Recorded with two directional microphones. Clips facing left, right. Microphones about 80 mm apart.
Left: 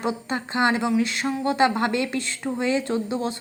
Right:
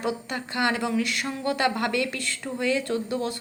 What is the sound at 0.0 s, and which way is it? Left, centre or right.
A woman's voice, left.